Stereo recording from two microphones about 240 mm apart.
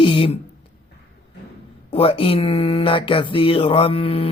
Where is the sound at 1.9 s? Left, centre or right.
Left.